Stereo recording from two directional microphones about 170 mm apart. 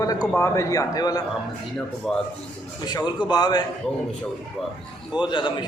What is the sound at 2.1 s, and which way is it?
Speech, centre (ahead or behind).